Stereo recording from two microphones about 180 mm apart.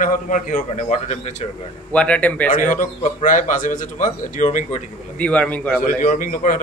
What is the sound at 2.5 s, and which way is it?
A man's voice, 45° left (ahead or behind).